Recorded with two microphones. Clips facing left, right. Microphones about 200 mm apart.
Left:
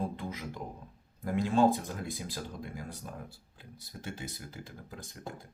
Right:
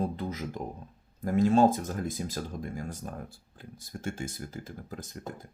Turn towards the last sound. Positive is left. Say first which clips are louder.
# right 5 dB
turn(degrees=-45)  # may be behind; listen again after turning